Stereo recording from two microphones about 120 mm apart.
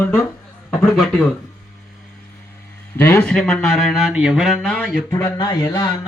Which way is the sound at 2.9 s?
15° left (ahead or behind).